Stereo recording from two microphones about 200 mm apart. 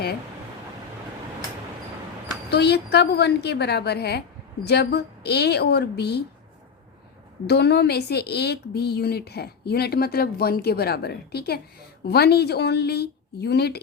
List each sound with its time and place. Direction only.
2.5 s a woman's voice: 55° left (ahead or behind)
7.4 s a woman's voice: 55° left (ahead or behind)